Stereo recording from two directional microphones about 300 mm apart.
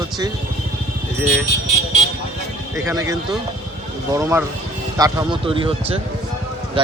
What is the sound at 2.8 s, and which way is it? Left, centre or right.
Speech, centre.